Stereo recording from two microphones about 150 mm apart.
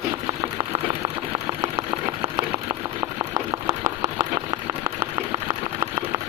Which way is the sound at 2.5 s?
35° right (ahead or behind).